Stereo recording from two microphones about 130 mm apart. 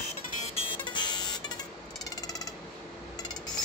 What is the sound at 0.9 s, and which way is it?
Vehicle, 35° left (ahead or behind).